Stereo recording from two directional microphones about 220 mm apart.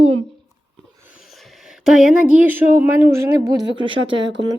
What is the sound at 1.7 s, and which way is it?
A woman's voice, centre (ahead or behind).